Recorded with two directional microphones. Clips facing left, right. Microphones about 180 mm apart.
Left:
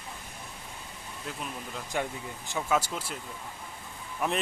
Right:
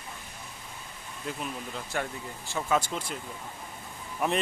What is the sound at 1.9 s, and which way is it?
Speech, 15° left (ahead or behind).